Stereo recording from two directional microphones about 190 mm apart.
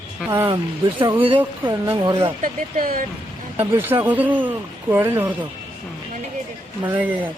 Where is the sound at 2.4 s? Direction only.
45° right (ahead or behind).